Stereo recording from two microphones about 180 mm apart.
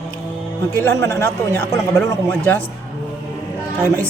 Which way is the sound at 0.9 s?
15° left (ahead or behind).